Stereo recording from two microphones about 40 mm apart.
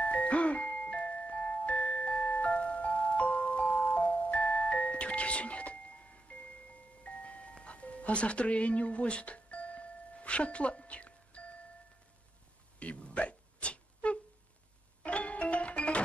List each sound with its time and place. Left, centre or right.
0.0 s music: left
12.7 s hiccup: left
15.0 s music: left